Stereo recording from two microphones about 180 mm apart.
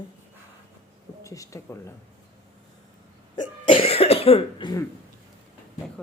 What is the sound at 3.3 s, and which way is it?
Speech, 30° left (ahead or behind).